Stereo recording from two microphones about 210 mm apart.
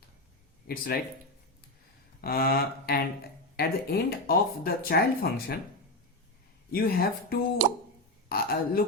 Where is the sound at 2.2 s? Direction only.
45° left (ahead or behind).